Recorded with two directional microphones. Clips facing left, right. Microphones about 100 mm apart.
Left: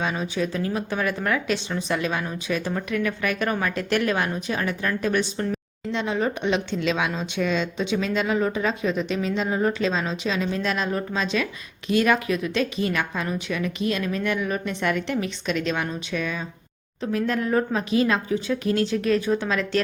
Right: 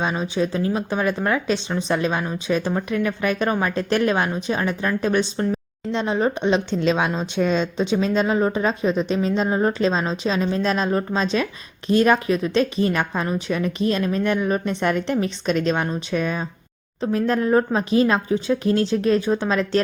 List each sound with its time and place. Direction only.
0.0 s speech: 25° right (ahead or behind)